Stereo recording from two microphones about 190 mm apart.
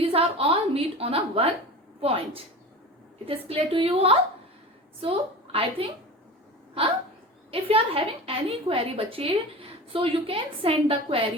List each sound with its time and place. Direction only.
0.0 s a woman's voice: 30° right (ahead or behind)
7.5 s a woman's voice: 30° right (ahead or behind)